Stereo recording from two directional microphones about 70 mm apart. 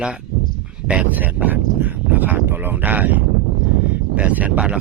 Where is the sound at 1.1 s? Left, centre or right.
Right.